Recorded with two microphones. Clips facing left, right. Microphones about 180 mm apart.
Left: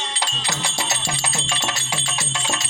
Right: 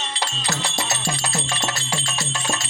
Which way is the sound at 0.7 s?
Centre (ahead or behind).